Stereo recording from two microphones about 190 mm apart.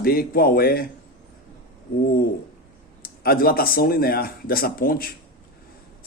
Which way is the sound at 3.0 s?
50° left (ahead or behind).